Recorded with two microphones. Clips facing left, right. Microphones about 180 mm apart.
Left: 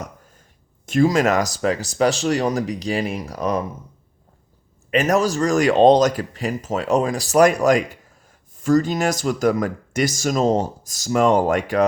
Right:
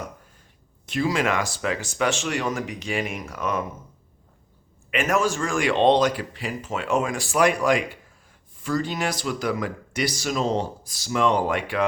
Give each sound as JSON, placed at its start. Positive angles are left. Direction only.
{"t": 0.9, "sound": "speech", "side_deg": 45}
{"t": 4.9, "sound": "speech", "side_deg": 40}